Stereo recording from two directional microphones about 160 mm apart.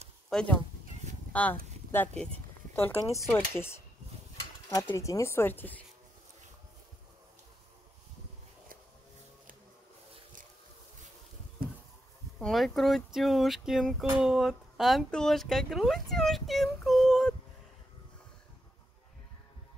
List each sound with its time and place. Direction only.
0.3 s speech: 5° left (ahead or behind)
12.4 s speech: centre (ahead or behind)